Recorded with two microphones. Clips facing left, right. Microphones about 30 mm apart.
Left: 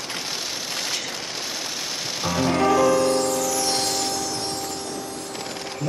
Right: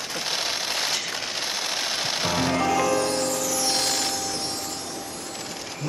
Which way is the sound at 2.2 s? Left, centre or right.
Right.